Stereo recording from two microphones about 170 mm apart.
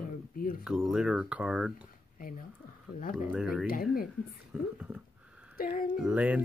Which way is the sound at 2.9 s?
60° left (ahead or behind).